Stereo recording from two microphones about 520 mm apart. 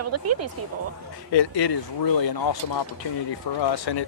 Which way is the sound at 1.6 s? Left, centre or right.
Left.